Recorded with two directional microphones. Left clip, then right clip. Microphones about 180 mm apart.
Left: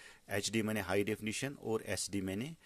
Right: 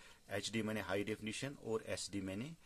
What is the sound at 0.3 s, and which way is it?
Speech, 35° left (ahead or behind).